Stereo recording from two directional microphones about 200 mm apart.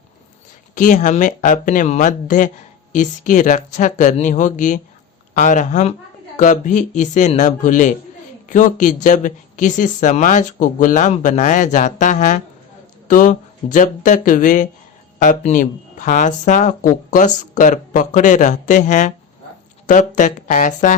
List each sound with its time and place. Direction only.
0.8 s speech: 40° left (ahead or behind)